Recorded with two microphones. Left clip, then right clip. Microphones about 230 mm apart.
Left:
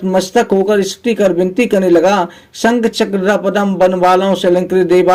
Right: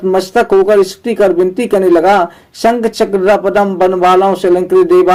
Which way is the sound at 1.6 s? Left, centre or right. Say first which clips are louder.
Right 2 dB; left.